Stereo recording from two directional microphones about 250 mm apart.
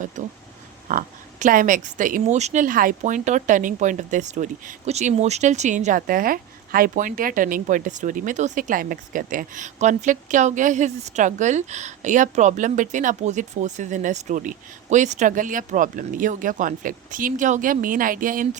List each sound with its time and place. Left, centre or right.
0.9 s speech: right